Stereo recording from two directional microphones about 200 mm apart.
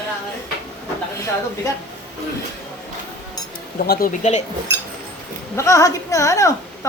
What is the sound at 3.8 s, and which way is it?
Speech, 45° left (ahead or behind).